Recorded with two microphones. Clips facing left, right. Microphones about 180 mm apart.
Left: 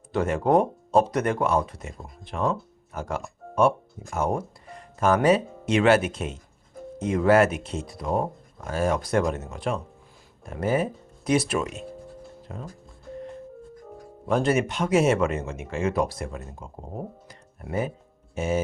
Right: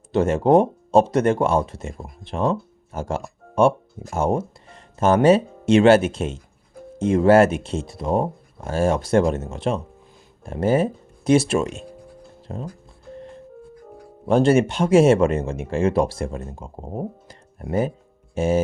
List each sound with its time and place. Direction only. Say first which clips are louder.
0.1 s speech: right 5 dB; 25° right (ahead or behind)
12.4 s music: right 8 dB; 30° right (ahead or behind)
14.3 s speech: right 6 dB; 30° right (ahead or behind)
17.2 s music: right 6 dB; 35° right (ahead or behind)
18.3 s speech: right 6 dB; 30° right (ahead or behind)